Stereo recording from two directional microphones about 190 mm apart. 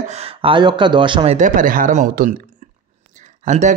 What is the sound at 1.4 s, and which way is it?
Speech, 45° right (ahead or behind).